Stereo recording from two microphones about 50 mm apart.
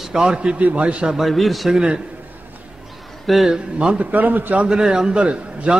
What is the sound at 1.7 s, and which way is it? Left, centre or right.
Speech, centre.